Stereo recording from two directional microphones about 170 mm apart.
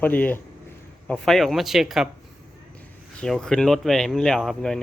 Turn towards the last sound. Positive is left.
turn(degrees=0)  # may be behind; listen again after turning